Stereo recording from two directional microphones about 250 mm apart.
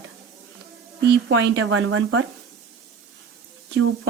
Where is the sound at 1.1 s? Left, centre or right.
Right.